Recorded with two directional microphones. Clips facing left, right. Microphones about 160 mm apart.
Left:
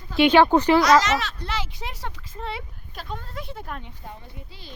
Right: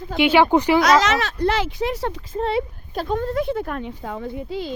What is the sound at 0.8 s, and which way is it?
Speech, 55° right (ahead or behind).